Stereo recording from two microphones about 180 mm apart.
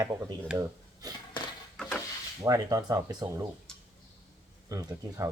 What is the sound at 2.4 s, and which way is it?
Speech, 20° right (ahead or behind).